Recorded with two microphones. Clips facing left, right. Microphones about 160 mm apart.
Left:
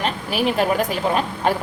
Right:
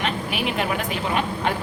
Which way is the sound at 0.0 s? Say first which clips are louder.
Left 4 dB; 40° left (ahead or behind).